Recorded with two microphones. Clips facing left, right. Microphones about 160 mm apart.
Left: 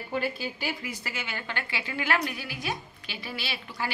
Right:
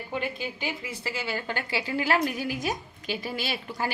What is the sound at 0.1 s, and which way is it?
A woman's voice, 20° right (ahead or behind).